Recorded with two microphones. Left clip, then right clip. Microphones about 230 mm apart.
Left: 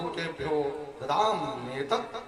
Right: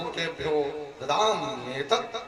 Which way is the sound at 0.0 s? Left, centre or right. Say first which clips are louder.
Right 3 dB; right.